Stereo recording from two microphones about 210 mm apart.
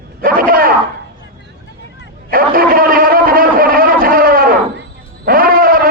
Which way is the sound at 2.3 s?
45° right (ahead or behind).